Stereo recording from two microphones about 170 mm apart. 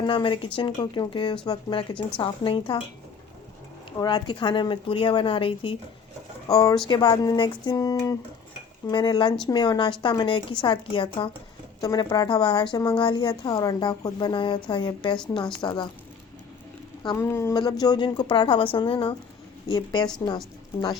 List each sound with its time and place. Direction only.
0.0 s a woman's voice: 30° left (ahead or behind)
4.0 s a woman's voice: 25° left (ahead or behind)
6.5 s a woman's voice: 20° left (ahead or behind)
17.0 s speech: 25° left (ahead or behind)
17.2 s a woman's voice: 15° left (ahead or behind)